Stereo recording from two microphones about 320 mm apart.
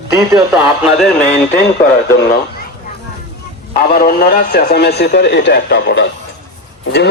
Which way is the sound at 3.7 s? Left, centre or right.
Left.